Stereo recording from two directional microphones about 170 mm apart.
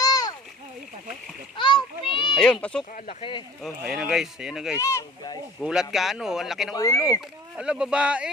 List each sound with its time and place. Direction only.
0.0 s splash: 20° left (ahead or behind)
1.5 s children playing: 30° left (ahead or behind)
2.3 s speech: 5° left (ahead or behind)
2.9 s speech: 35° left (ahead or behind)
3.6 s speech: 5° right (ahead or behind)
4.8 s speech: 20° left (ahead or behind)
5.5 s speech: 5° right (ahead or behind)
6.7 s speech: 20° left (ahead or behind)
7.5 s speech: 5° right (ahead or behind)